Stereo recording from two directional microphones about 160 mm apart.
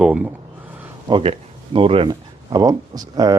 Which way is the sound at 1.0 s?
35° right (ahead or behind).